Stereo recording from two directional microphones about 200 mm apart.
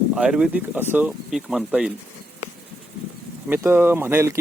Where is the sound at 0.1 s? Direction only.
5° right (ahead or behind).